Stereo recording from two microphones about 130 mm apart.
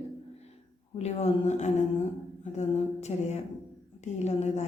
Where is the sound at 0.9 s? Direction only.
55° left (ahead or behind).